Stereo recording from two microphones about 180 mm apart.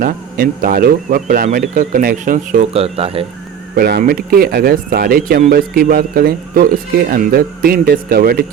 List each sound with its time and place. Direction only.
0.0 s speech: 50° right (ahead or behind); by 3.2 s 35° right (ahead or behind)
3.8 s speech: 60° right (ahead or behind)